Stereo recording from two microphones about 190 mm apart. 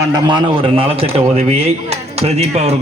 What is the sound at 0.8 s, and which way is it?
A man's voice, 30° right (ahead or behind).